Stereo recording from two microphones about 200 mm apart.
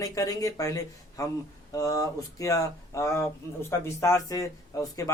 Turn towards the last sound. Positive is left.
turn(degrees=15)  # may be behind; listen again after turning